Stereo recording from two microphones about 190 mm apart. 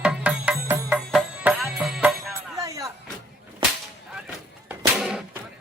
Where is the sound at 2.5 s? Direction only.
15° right (ahead or behind).